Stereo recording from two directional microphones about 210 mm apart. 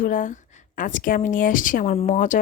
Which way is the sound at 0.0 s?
40° left (ahead or behind).